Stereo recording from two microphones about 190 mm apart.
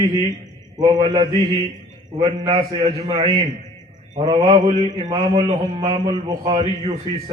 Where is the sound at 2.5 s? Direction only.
30° right (ahead or behind).